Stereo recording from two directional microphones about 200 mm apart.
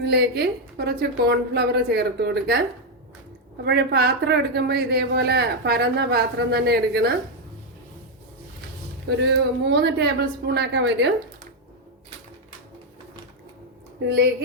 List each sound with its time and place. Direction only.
0.0 s a woman's voice: 55° right (ahead or behind)
9.0 s a woman's voice: 60° right (ahead or behind)